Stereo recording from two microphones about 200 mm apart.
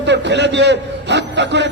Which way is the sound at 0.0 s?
60° right (ahead or behind).